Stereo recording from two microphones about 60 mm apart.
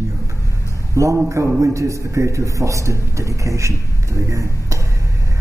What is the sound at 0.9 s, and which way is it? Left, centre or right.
A man's voice, right.